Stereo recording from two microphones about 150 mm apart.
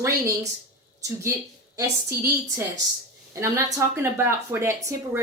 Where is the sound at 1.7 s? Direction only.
15° right (ahead or behind).